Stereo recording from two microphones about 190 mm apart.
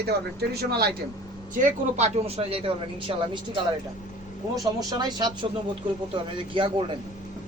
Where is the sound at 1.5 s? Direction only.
40° right (ahead or behind).